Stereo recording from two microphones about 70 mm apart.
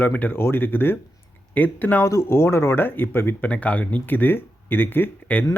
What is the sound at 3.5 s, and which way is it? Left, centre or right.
Speech, centre.